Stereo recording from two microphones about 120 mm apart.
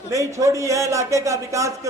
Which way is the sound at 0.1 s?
25° right (ahead or behind).